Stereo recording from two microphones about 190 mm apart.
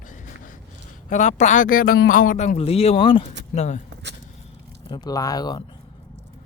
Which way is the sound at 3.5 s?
35° left (ahead or behind).